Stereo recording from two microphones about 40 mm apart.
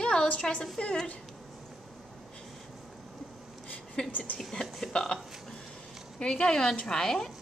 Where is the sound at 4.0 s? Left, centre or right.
Left.